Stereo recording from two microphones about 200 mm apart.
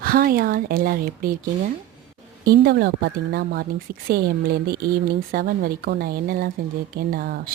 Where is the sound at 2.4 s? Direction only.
50° right (ahead or behind).